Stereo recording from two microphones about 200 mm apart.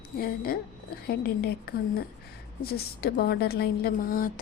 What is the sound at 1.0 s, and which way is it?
A woman's voice, 50° left (ahead or behind).